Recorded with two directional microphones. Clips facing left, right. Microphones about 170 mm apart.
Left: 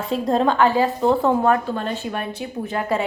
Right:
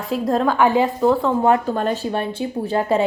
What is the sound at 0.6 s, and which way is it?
Speech, 15° right (ahead or behind).